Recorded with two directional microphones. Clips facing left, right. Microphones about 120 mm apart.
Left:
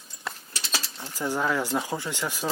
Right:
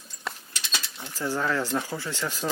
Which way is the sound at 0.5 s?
35° left (ahead or behind).